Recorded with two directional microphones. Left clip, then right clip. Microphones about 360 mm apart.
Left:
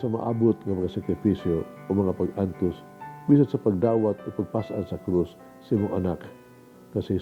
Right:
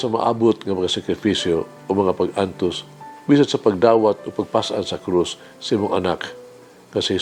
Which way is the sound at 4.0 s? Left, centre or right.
Centre.